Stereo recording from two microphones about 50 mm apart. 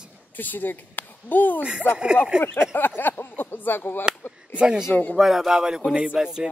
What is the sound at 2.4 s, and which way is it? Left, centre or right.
Speech, left.